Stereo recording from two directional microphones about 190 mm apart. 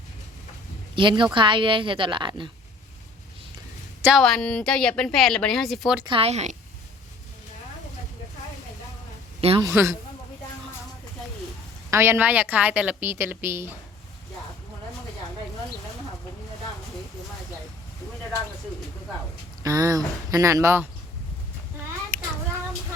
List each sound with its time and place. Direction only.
0.9 s a woman's voice: 25° right (ahead or behind)
4.0 s a woman's voice: centre (ahead or behind)
6.1 s speech: 30° right (ahead or behind)
9.4 s a man's voice: 30° right (ahead or behind)
9.6 s a woman's voice: 15° right (ahead or behind)
11.9 s a woman's voice: 15° right (ahead or behind)
19.6 s a woman's voice: 20° right (ahead or behind)
22.1 s child singing: 5° left (ahead or behind)